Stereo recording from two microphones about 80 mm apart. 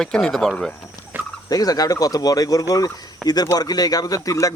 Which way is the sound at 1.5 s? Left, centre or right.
Left.